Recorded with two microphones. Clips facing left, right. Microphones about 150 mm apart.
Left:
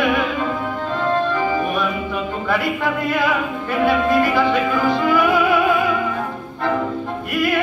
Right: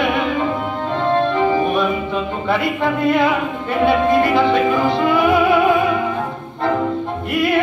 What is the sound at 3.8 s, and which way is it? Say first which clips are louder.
Music: right 2 dB; 20° right (ahead or behind).